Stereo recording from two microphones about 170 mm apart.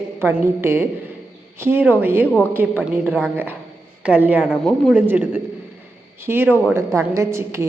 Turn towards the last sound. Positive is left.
turn(degrees=-15)  # may be behind; listen again after turning